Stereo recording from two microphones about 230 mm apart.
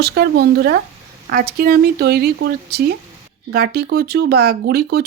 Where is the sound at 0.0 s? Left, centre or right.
Right.